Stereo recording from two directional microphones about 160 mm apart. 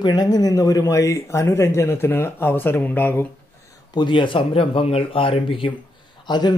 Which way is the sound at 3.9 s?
30° left (ahead or behind).